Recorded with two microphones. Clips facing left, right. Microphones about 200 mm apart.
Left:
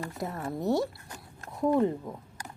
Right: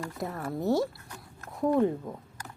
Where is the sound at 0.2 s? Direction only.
Centre (ahead or behind).